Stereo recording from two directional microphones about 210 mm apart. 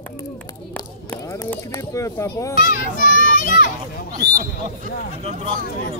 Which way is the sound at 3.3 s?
40° left (ahead or behind).